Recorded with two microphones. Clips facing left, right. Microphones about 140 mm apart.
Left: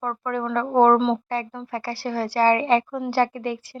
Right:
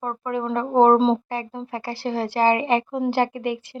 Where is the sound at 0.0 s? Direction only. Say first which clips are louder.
Even; 20° right (ahead or behind).